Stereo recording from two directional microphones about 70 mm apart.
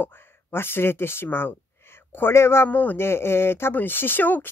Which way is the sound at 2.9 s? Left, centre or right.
Left.